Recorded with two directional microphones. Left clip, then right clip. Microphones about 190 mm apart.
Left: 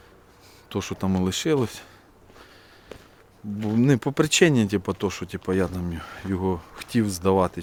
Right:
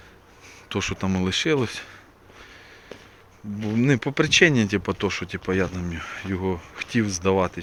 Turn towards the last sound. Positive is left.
turn(degrees=25)  # may be behind; listen again after turning